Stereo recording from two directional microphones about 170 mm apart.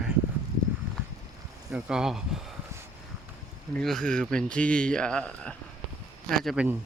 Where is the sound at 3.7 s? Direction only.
Centre (ahead or behind).